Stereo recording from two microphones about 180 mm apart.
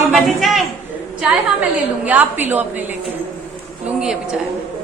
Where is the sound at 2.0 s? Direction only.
10° right (ahead or behind).